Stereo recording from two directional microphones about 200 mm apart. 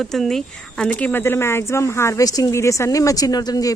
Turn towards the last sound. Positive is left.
turn(degrees=20)  # may be behind; listen again after turning